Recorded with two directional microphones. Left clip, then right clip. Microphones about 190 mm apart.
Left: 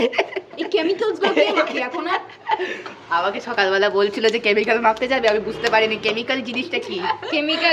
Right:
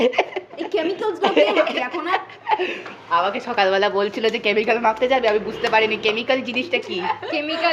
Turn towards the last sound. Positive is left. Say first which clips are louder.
# left 2 dB
turn(degrees=15)  # may be behind; listen again after turning